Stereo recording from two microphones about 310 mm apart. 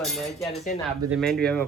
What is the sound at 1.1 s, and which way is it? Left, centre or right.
Speech, centre.